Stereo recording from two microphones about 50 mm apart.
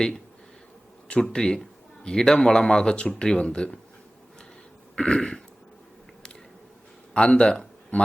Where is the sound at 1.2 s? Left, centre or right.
Centre.